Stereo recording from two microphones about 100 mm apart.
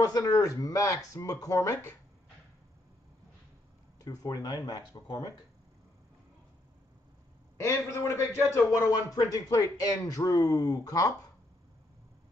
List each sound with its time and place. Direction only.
0.0 s a man's voice: 40° left (ahead or behind)
4.0 s a man's voice: 40° left (ahead or behind)
7.5 s a man's voice: 30° left (ahead or behind)